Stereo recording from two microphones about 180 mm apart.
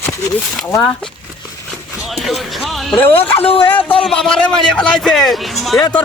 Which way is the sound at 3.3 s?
30° left (ahead or behind).